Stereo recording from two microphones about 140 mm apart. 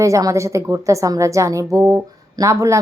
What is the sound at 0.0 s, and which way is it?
A woman's voice, 25° right (ahead or behind).